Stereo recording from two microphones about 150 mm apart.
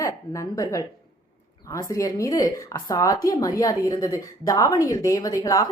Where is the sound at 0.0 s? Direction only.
20° left (ahead or behind).